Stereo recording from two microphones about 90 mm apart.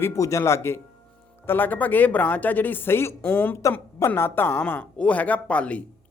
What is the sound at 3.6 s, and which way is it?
A woman's voice, 30° left (ahead or behind).